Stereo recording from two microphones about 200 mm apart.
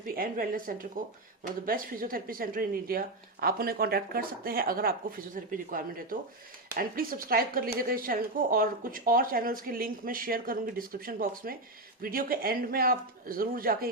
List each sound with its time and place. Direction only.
0.0 s a woman's voice: 45° right (ahead or behind)